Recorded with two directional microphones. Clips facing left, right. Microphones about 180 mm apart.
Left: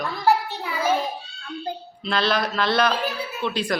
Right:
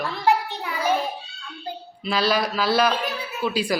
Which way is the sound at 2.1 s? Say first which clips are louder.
Right 1 dB; 5° right (ahead or behind).